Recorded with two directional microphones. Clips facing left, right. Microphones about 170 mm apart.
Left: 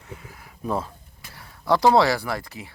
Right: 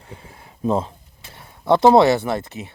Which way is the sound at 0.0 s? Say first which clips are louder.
Even; 30° right (ahead or behind).